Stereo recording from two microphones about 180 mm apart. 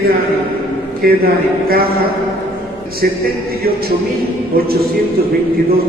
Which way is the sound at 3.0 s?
55° right (ahead or behind).